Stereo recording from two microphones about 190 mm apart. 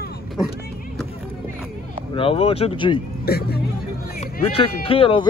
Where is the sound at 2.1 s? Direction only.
30° left (ahead or behind).